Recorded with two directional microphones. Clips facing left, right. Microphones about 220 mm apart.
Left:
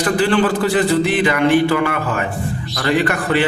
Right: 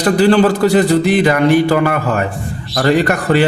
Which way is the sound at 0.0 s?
40° right (ahead or behind).